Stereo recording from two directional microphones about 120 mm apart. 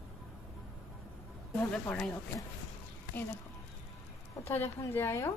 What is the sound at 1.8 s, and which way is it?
Speech, 10° left (ahead or behind).